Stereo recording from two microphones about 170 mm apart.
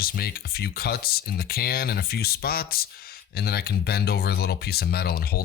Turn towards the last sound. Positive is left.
turn(degrees=65)  # may be behind; listen again after turning